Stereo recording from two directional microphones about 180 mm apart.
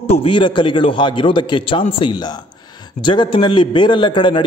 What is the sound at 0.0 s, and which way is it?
A man's voice, 30° left (ahead or behind).